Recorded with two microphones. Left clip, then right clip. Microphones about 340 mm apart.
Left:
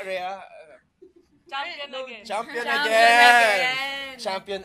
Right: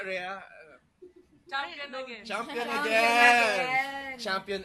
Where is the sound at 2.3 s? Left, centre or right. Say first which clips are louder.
Left 6 dB; centre.